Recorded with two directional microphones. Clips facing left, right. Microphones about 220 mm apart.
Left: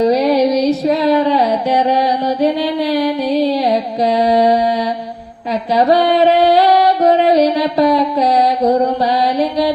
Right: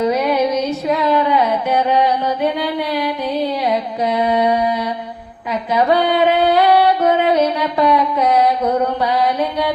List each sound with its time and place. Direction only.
0.0 s music: 35° left (ahead or behind)
5.7 s music: 35° left (ahead or behind)